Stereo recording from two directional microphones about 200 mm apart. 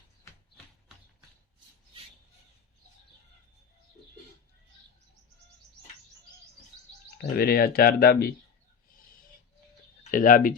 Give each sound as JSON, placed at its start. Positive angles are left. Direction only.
{"t": 7.2, "sound": "speech", "side_deg": 50}
{"t": 10.0, "sound": "speech", "side_deg": 40}